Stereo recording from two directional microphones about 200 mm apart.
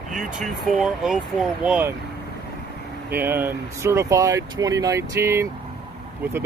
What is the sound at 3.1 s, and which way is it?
Speech, 10° right (ahead or behind).